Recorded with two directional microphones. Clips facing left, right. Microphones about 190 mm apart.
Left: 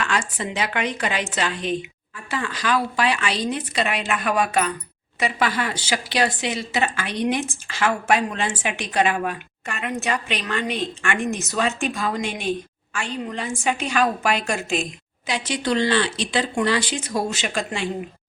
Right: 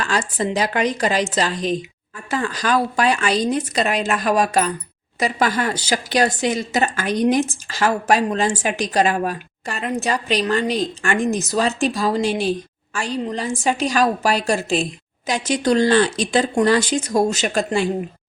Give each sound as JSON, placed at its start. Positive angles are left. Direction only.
{"t": 0.0, "sound": "speech", "side_deg": -35}